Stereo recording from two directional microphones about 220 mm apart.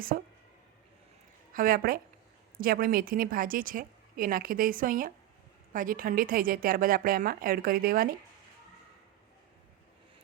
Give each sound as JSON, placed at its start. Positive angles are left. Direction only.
{"t": 0.1, "sound": "speech", "side_deg": -40}
{"t": 1.5, "sound": "a woman's voice", "side_deg": -40}